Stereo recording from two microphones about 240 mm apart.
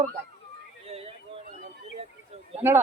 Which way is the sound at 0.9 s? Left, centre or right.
Right.